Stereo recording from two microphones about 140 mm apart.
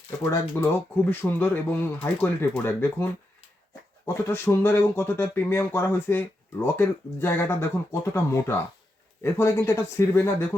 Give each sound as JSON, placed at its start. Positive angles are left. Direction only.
{"t": 0.3, "sound": "speech", "side_deg": 15}